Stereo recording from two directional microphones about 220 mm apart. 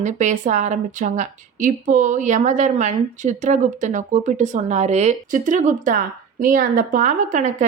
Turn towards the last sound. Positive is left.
turn(degrees=-35)  # may be behind; listen again after turning